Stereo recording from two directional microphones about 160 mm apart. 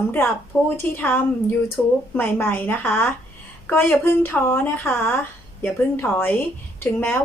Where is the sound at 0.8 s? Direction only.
15° left (ahead or behind).